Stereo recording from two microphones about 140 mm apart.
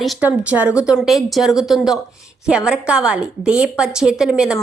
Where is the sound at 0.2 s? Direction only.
10° right (ahead or behind).